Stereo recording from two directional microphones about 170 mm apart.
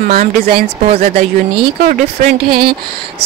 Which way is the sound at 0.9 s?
35° right (ahead or behind).